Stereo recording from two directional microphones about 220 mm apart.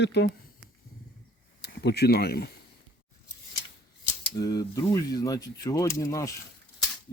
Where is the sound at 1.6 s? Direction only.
50° left (ahead or behind).